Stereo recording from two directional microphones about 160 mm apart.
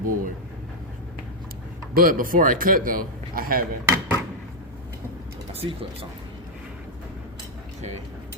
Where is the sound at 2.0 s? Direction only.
60° right (ahead or behind).